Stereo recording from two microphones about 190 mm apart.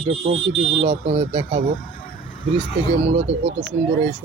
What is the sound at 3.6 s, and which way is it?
Speech, 65° right (ahead or behind).